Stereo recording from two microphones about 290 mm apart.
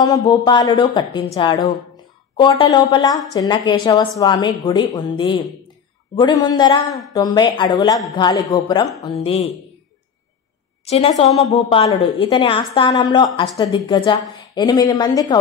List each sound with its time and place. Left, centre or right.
0.0 s a woman's voice: centre
10.9 s a woman's voice: left